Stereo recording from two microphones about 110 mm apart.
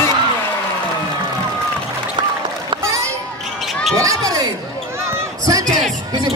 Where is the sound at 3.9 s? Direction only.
30° right (ahead or behind).